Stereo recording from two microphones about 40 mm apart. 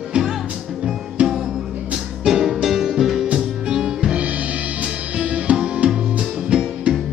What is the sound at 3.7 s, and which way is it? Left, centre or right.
Music, centre.